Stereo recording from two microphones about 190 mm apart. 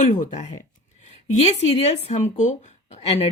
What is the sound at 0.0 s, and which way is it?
Speech, 40° left (ahead or behind).